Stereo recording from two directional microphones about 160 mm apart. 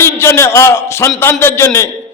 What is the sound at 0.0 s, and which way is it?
A man's voice, 15° left (ahead or behind).